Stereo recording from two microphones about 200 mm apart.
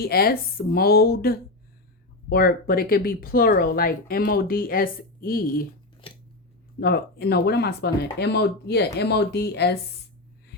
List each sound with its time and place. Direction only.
0.0 s speech: 50° left (ahead or behind)
6.0 s scissors: 25° left (ahead or behind)
6.7 s speech: 50° left (ahead or behind)